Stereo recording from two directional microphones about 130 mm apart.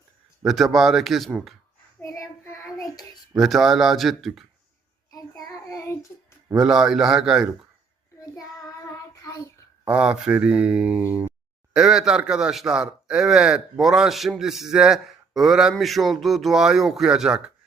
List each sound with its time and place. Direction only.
0.4 s speech: centre (ahead or behind)
2.0 s child singing: 20° left (ahead or behind)
3.3 s speech: centre (ahead or behind)
5.1 s child singing: 25° left (ahead or behind)
6.6 s speech: centre (ahead or behind)
9.1 s child singing: 25° left (ahead or behind)
9.8 s speech: 10° right (ahead or behind)